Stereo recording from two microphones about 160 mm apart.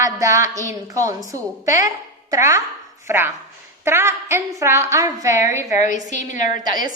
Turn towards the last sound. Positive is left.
turn(degrees=55)  # may be behind; listen again after turning